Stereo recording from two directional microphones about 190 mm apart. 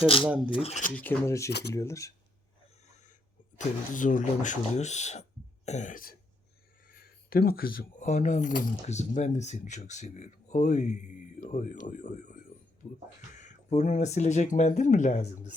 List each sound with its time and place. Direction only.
0.0 s speech: 30° left (ahead or behind)
0.3 s speech: 5° right (ahead or behind)
0.5 s speech: 35° left (ahead or behind)
0.9 s speech: 10° left (ahead or behind)
1.5 s speech: 60° left (ahead or behind)
1.7 s speech: 15° left (ahead or behind)
3.9 s speech: 45° left (ahead or behind)
5.6 s throat clearing: 40° left (ahead or behind)
6.8 s speech: 50° left (ahead or behind)